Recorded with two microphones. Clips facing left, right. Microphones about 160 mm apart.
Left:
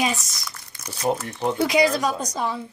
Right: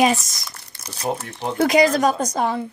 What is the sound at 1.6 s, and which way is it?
A woman's voice, 45° right (ahead or behind).